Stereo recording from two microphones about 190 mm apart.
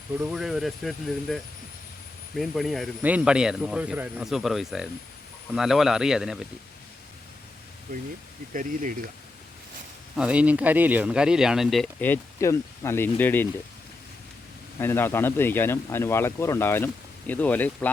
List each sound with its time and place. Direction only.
0.2 s speech: centre (ahead or behind)
7.9 s speech: 50° right (ahead or behind)
10.2 s speech: 5° right (ahead or behind); by 13.5 s 10° left (ahead or behind)
14.8 s speech: 10° left (ahead or behind)